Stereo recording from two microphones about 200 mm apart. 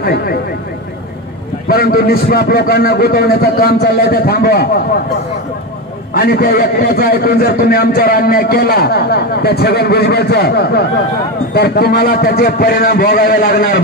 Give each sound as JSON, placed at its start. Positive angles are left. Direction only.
{"t": 1.7, "sound": "a man's voice", "side_deg": 50}
{"t": 6.1, "sound": "a man's voice", "side_deg": 50}